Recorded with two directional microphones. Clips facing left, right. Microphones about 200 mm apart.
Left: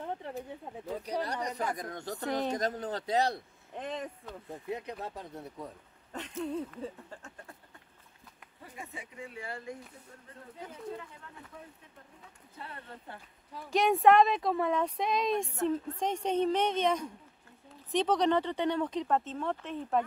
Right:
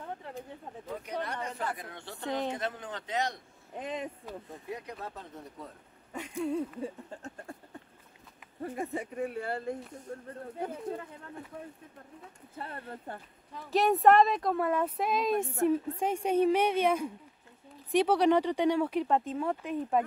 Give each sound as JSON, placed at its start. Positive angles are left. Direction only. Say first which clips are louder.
{"t": 1.0, "sound": "a man's voice", "louder": "left 2 dB", "side_deg": 35}
{"t": 1.5, "sound": "speech", "louder": "left 2 dB", "side_deg": 15}
{"t": 1.8, "sound": "a man's voice", "louder": "left 5 dB", "side_deg": 40}
{"t": 3.7, "sound": "speech", "louder": "right 1 dB", "side_deg": -10}
{"t": 4.6, "sound": "speech", "louder": "left 3 dB", "side_deg": 25}
{"t": 5.1, "sound": "speech", "louder": "left 2 dB", "side_deg": 10}
{"t": 6.1, "sound": "speech", "louder": "right 3 dB", "side_deg": -10}
{"t": 7.2, "sound": "a sound", "louder": "right 7 dB", "side_deg": -35}
{"t": 8.5, "sound": "speech", "louder": "right 11 dB", "side_deg": -55}
{"t": 10.0, "sound": "speech", "louder": "right 10 dB", "side_deg": -50}
{"t": 12.5, "sound": "speech", "louder": "right 5 dB", "side_deg": -45}
{"t": 13.7, "sound": "speech", "louder": "right 1 dB", "side_deg": 0}